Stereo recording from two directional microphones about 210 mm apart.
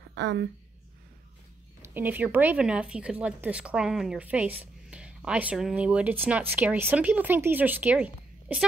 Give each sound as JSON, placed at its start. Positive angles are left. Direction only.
{"t": 0.1, "sound": "a woman's voice", "side_deg": -55}
{"t": 1.8, "sound": "speech", "side_deg": -10}